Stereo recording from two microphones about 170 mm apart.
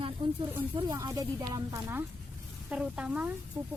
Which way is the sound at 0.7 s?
25° right (ahead or behind).